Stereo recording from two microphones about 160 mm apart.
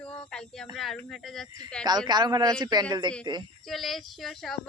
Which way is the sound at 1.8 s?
25° right (ahead or behind).